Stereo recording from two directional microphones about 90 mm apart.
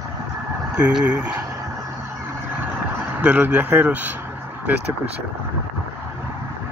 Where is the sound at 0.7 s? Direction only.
10° right (ahead or behind).